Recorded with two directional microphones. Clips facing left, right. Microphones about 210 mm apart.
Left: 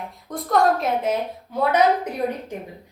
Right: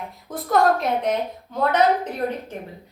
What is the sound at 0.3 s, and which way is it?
A woman's voice, centre (ahead or behind).